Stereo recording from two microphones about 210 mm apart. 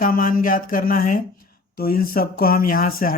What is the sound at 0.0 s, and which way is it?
Speech, 40° left (ahead or behind).